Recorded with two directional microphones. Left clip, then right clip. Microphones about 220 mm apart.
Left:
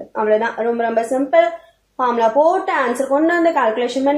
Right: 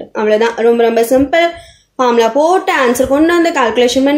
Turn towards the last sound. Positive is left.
turn(degrees=-45)  # may be behind; listen again after turning